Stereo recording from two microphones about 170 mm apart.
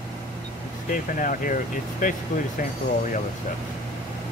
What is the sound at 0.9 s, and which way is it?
Speech, 50° left (ahead or behind).